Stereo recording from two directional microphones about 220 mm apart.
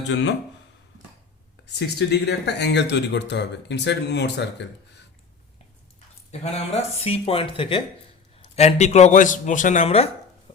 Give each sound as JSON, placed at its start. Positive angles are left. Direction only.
{"t": 0.1, "sound": "speech", "side_deg": 55}
{"t": 1.8, "sound": "speech", "side_deg": 50}
{"t": 6.4, "sound": "speech", "side_deg": 30}